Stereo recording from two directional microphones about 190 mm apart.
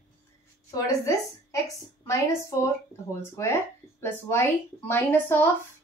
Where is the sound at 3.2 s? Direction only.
15° left (ahead or behind).